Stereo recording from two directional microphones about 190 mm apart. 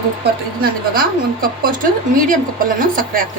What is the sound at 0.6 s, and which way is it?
Speech, 50° right (ahead or behind).